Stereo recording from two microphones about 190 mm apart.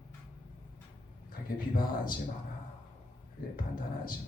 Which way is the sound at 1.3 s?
50° left (ahead or behind).